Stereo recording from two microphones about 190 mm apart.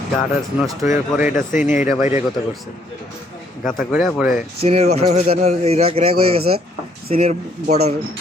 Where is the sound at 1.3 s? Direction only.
40° left (ahead or behind).